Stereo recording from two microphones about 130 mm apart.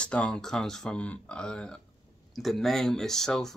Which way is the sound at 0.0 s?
10° left (ahead or behind).